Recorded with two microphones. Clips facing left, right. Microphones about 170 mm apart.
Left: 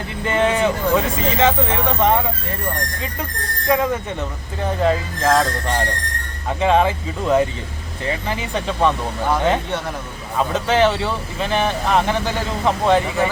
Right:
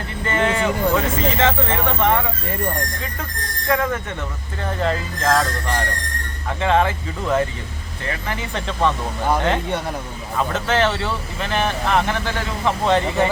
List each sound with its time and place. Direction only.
0.3 s speech: 15° left (ahead or behind)
3.7 s speech: 15° left (ahead or behind)
6.6 s speech: 15° left (ahead or behind)
10.3 s speech: 15° left (ahead or behind)